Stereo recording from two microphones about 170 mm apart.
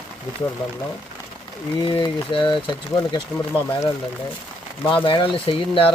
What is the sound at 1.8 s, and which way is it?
Speech, 30° left (ahead or behind).